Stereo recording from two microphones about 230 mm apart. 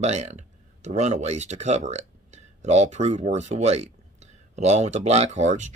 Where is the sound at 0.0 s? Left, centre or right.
Right.